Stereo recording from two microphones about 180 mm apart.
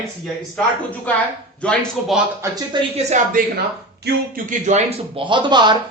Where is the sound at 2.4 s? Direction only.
20° right (ahead or behind).